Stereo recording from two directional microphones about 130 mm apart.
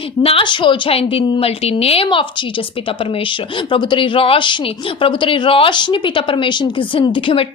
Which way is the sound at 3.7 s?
40° left (ahead or behind).